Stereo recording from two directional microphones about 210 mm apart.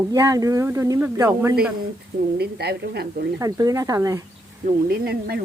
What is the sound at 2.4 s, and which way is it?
Speech, 50° right (ahead or behind).